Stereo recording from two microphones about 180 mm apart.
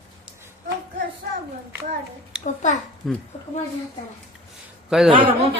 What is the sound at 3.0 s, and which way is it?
Speech, centre (ahead or behind).